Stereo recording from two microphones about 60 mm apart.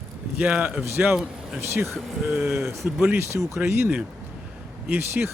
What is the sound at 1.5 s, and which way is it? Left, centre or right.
Speech, right.